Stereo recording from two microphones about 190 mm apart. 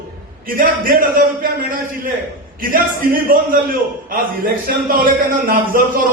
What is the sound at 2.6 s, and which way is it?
Speech, 45° right (ahead or behind).